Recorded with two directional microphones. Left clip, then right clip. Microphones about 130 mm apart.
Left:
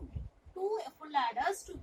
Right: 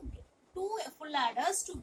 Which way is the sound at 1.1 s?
25° right (ahead or behind).